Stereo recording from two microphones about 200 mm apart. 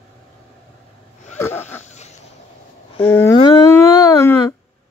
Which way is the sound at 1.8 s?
35° left (ahead or behind).